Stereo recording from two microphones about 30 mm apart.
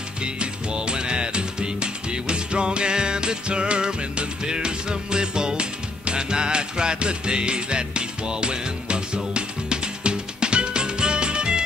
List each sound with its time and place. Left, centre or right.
0.2 s music: right